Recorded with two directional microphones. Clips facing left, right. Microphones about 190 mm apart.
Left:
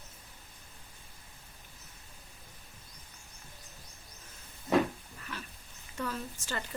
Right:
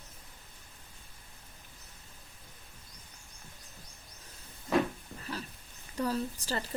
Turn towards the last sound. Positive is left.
turn(degrees=-35)  # may be behind; listen again after turning